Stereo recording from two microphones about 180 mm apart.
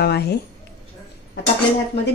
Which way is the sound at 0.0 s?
65° left (ahead or behind).